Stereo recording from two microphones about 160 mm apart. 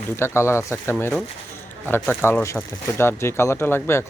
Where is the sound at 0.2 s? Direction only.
15° left (ahead or behind).